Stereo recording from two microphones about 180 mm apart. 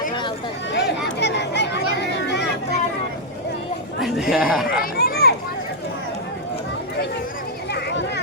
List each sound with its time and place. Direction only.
0.7 s chatter: 70° left (ahead or behind)
4.0 s speech: centre (ahead or behind)
4.7 s a sound: 55° left (ahead or behind)
7.7 s children playing: 70° left (ahead or behind)